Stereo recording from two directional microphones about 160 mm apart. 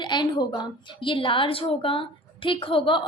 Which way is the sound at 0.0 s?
30° left (ahead or behind).